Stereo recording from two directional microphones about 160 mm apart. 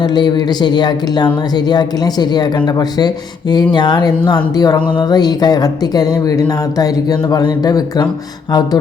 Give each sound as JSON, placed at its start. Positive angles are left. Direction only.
{"t": 0.0, "sound": "speech", "side_deg": 30}
{"t": 3.5, "sound": "speech", "side_deg": 25}